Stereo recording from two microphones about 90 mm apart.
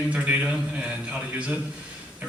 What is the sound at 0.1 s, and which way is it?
A man's voice, 15° right (ahead or behind).